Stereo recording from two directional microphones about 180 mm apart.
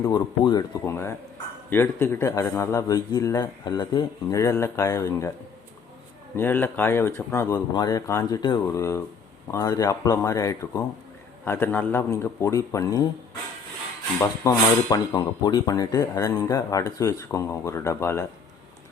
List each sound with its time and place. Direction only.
0.9 s speech: 15° left (ahead or behind)
6.3 s speech: 10° left (ahead or behind)
14.2 s speech: 20° left (ahead or behind)